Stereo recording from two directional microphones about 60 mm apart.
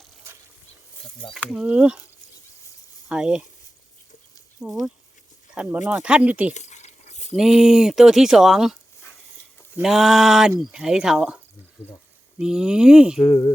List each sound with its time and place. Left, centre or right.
1.6 s speech: centre
3.1 s speech: centre
4.6 s speech: right
5.5 s speech: right
7.3 s speech: centre
9.8 s speech: centre
12.4 s speech: centre
13.2 s speech: left